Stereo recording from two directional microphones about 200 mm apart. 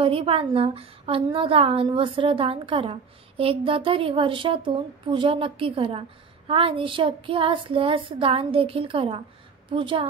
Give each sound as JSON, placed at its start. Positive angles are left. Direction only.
{"t": 0.0, "sound": "a woman's voice", "side_deg": -25}